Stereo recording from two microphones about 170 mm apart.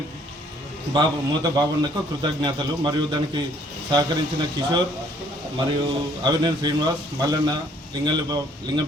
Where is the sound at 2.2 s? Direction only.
25° right (ahead or behind).